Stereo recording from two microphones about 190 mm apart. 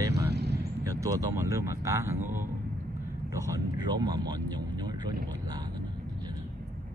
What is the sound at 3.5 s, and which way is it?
Vehicle, 20° right (ahead or behind).